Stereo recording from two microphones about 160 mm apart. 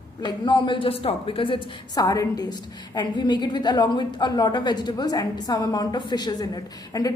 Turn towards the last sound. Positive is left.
turn(degrees=25)  # may be behind; listen again after turning